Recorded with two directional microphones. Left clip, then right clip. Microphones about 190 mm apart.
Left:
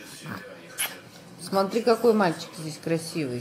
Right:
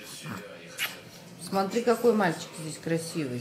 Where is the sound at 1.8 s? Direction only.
25° left (ahead or behind).